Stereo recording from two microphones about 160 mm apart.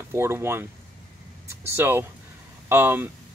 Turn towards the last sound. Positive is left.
turn(degrees=-15)  # may be behind; listen again after turning